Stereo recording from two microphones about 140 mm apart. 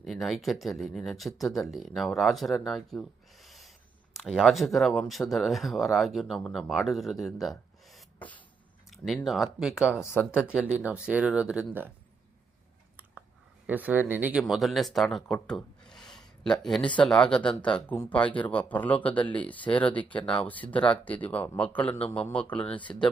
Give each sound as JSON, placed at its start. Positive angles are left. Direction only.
{"t": 0.0, "sound": "speech", "side_deg": 0}
{"t": 8.9, "sound": "speech", "side_deg": 0}
{"t": 10.0, "sound": "speech", "side_deg": 15}
{"t": 10.7, "sound": "speech", "side_deg": -10}
{"t": 13.7, "sound": "speech", "side_deg": -10}
{"t": 14.4, "sound": "speech", "side_deg": 0}